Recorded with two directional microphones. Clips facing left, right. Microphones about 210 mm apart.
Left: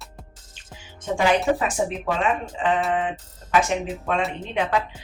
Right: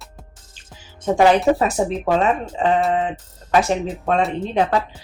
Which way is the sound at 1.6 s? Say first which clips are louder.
Right 5 dB; 40° right (ahead or behind).